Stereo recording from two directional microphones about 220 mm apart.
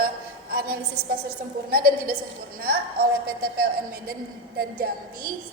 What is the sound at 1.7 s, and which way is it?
A woman's voice, 40° right (ahead or behind).